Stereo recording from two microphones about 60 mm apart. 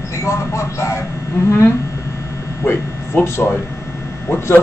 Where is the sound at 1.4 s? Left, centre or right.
Left.